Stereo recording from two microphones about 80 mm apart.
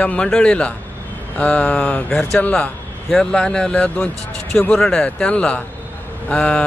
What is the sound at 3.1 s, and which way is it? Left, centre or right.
Speech, centre.